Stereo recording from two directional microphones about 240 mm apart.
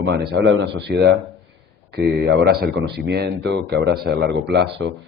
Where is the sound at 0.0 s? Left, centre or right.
Right.